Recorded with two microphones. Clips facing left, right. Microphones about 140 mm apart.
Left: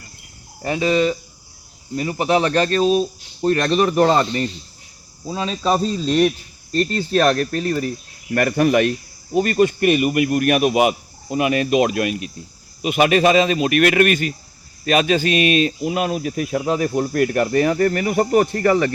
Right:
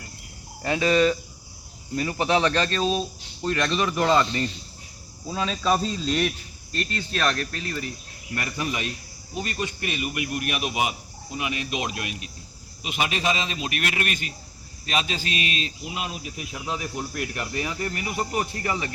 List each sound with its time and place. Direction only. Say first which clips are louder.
0.6 s speech: left 3 dB; 25° left (ahead or behind)
5.2 s speech: left 4 dB; 25° left (ahead or behind); by 7.9 s 40° left (ahead or behind)
8.3 s speech: left 13 dB; 60° left (ahead or behind)